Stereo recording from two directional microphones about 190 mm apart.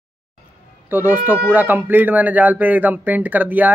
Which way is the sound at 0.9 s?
10° right (ahead or behind).